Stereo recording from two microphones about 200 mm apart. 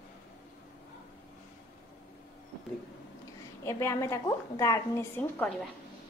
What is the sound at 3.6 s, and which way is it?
A woman's voice, 15° left (ahead or behind).